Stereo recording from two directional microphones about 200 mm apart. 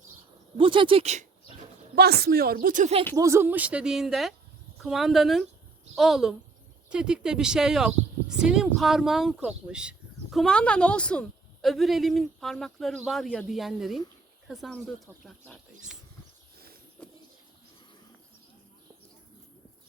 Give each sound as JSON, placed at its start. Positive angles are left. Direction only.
{"t": 0.5, "sound": "speech", "side_deg": -25}
{"t": 2.0, "sound": "speech", "side_deg": -50}
{"t": 3.2, "sound": "speech", "side_deg": -15}